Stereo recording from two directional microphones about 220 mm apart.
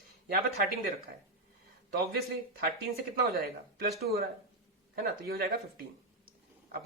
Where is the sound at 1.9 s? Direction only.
45° right (ahead or behind).